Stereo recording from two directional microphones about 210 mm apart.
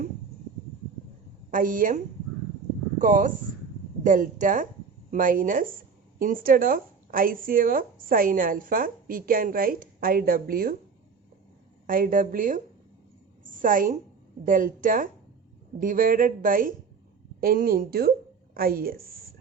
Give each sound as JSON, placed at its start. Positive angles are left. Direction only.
{"t": 1.5, "sound": "speech", "side_deg": -40}
{"t": 3.0, "sound": "speech", "side_deg": -40}
{"t": 11.9, "sound": "speech", "side_deg": -40}
{"t": 13.4, "sound": "a sound", "side_deg": -40}
{"t": 14.4, "sound": "a woman's voice", "side_deg": -40}